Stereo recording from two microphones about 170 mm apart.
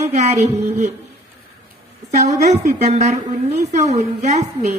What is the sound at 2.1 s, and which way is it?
A woman's voice, 45° right (ahead or behind).